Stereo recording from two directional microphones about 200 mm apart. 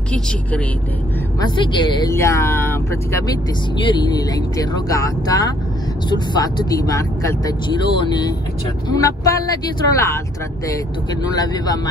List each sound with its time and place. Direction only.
1.6 s speech: 25° left (ahead or behind)
11.3 s speech: 20° left (ahead or behind)